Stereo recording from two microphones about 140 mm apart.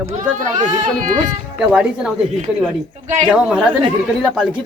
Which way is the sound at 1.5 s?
5° right (ahead or behind).